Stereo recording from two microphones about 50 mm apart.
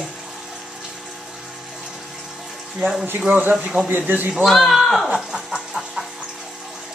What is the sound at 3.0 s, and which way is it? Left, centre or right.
Speech, right.